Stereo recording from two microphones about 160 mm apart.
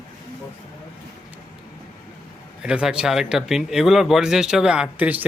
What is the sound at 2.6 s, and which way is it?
Speech, 5° right (ahead or behind).